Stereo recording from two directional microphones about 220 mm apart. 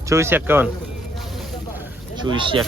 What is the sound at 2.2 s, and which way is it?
Speech, 20° right (ahead or behind).